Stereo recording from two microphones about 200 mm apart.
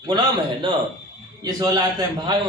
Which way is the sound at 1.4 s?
20° right (ahead or behind).